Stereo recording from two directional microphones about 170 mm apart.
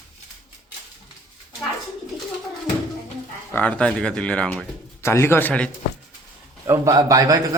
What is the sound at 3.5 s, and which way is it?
Speech, 10° left (ahead or behind).